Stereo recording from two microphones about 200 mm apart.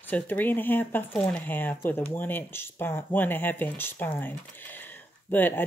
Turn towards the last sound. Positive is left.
turn(degrees=10)  # may be behind; listen again after turning